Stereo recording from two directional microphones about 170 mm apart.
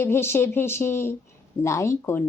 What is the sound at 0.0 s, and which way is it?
Speech, 15° left (ahead or behind).